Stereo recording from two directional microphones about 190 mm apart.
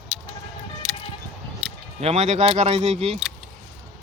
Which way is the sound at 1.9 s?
35° right (ahead or behind).